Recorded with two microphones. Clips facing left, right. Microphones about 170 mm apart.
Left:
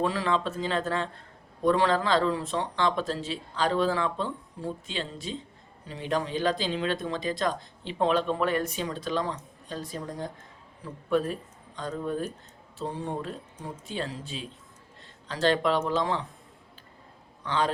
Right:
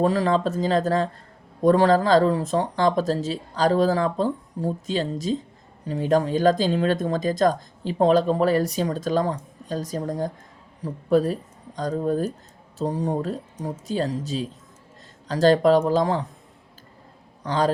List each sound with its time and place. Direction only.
0.0 s speech: 40° right (ahead or behind)
17.4 s a man's voice: 40° right (ahead or behind)